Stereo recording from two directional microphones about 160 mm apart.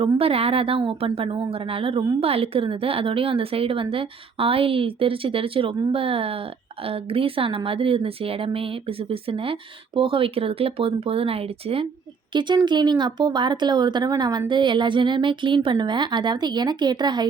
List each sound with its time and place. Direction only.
0.0 s speech: 35° right (ahead or behind)